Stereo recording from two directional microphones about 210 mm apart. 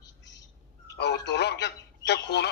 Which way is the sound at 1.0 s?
55° left (ahead or behind).